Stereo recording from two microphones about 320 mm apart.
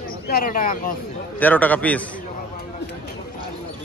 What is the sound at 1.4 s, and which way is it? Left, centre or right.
Speech, centre.